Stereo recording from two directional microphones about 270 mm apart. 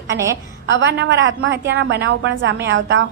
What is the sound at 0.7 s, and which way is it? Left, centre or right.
A woman's voice, right.